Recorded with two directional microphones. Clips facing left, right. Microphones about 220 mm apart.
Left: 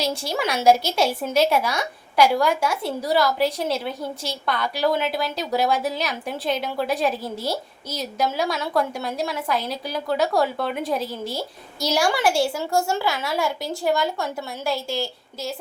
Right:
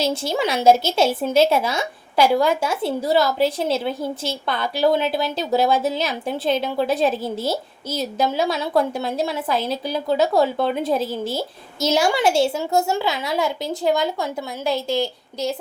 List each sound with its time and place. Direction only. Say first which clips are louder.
0.0 s speech: right 3 dB; 25° right (ahead or behind)